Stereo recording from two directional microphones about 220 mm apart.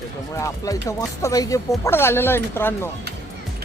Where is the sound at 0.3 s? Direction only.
15° left (ahead or behind).